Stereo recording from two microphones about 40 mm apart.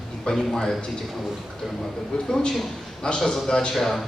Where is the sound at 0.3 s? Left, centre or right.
Centre.